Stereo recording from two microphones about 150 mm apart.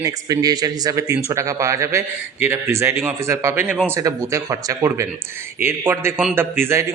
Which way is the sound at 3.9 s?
20° right (ahead or behind).